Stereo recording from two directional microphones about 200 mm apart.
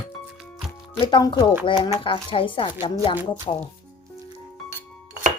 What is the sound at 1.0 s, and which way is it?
Speech, 25° left (ahead or behind).